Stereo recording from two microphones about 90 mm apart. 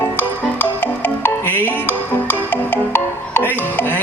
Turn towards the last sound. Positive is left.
turn(degrees=25)  # may be behind; listen again after turning